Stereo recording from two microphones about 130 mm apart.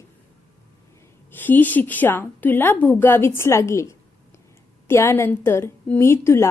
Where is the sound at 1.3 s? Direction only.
15° left (ahead or behind).